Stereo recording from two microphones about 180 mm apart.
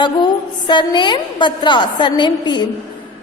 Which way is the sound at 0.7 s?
25° left (ahead or behind).